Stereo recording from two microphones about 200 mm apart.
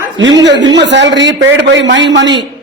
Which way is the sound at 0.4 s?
60° right (ahead or behind).